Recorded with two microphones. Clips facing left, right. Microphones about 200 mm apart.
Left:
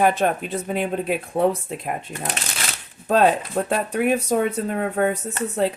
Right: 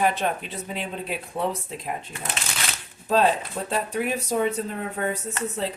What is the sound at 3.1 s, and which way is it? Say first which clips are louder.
Speech: left 3 dB; 55° left (ahead or behind).